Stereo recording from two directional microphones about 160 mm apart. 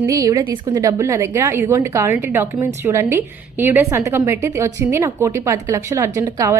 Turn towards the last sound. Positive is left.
turn(degrees=-20)  # may be behind; listen again after turning